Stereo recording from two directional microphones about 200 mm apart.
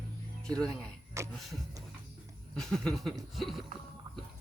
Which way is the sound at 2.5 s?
5° left (ahead or behind).